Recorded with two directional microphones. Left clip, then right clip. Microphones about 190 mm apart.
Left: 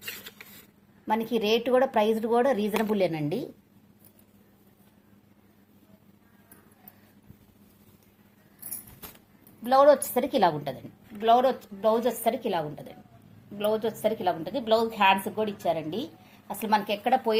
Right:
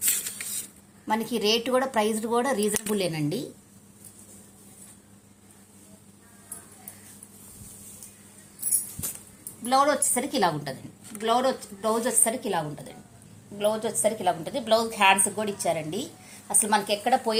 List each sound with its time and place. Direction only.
1.0 s speech: 25° left (ahead or behind)
9.6 s a woman's voice: 35° left (ahead or behind); by 17.3 s 20° left (ahead or behind)